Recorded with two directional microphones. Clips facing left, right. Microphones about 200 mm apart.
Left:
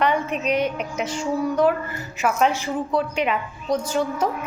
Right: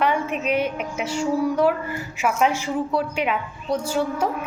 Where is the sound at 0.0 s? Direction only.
5° right (ahead or behind).